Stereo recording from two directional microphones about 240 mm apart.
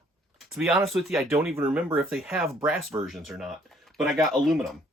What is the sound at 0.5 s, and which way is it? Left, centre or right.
Speech, centre.